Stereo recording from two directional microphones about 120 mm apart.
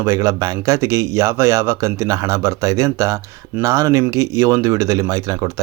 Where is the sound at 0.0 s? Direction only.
25° right (ahead or behind).